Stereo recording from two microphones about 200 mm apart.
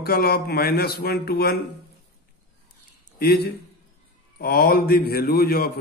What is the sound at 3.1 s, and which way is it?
A man's voice, 50° left (ahead or behind).